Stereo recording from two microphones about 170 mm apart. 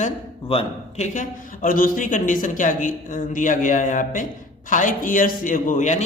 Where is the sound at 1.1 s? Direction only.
50° left (ahead or behind).